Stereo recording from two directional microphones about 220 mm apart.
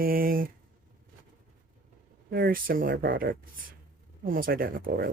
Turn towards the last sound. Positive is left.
turn(degrees=-40)  # may be behind; listen again after turning